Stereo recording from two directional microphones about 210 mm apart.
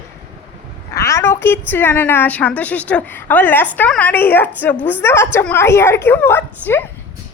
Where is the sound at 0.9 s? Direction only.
15° left (ahead or behind).